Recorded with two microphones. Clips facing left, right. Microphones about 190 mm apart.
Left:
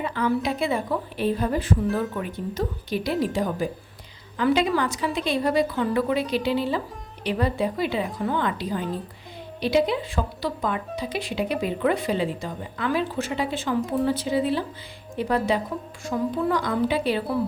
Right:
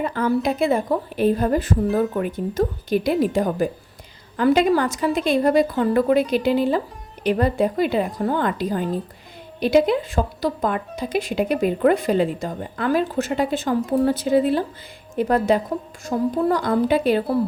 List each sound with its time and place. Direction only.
0.0 s speech: 45° right (ahead or behind)